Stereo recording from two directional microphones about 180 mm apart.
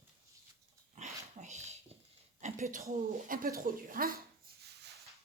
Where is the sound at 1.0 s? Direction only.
40° right (ahead or behind).